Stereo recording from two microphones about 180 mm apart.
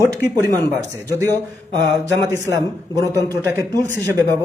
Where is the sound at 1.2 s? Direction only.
20° right (ahead or behind).